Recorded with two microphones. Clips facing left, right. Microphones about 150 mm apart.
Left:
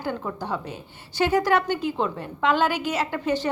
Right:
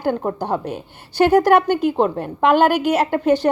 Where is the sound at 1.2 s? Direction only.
60° right (ahead or behind).